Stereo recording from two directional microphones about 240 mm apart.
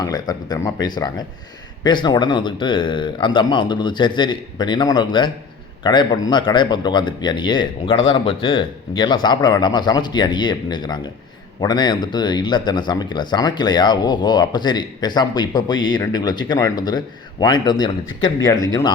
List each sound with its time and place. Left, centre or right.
0.0 s speech: centre